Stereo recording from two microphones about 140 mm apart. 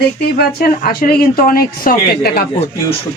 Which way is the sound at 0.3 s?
90° left.